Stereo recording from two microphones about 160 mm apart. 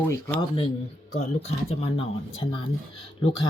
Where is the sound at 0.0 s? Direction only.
15° left (ahead or behind).